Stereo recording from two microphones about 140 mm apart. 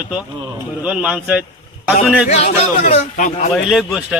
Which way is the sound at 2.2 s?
55° left (ahead or behind).